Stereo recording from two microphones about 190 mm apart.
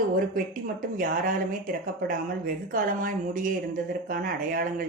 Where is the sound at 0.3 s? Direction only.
45° right (ahead or behind).